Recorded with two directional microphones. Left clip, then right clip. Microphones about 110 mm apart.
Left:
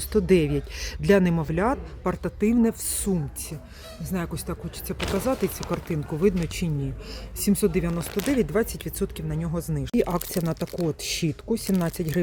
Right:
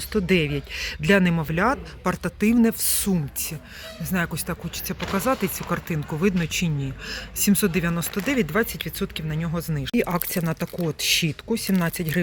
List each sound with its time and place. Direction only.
0.1 s speech: 40° left (ahead or behind)
2.0 s speech: 15° left (ahead or behind)